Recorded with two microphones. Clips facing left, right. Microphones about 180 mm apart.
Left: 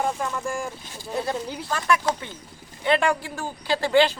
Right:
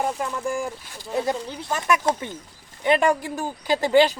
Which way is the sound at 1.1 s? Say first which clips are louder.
Right 2 dB; 15° right (ahead or behind).